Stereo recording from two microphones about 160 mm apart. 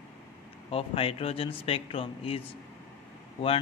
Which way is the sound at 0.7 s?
35° left (ahead or behind).